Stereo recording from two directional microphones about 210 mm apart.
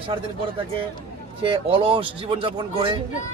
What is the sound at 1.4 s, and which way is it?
Speech, 25° right (ahead or behind).